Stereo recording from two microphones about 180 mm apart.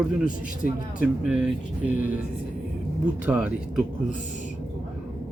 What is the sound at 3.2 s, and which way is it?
Speech, 5° right (ahead or behind).